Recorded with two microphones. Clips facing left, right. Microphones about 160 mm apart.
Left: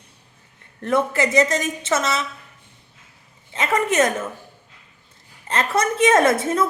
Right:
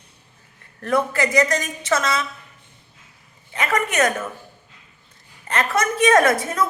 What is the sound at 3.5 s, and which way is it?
Speech, 25° left (ahead or behind).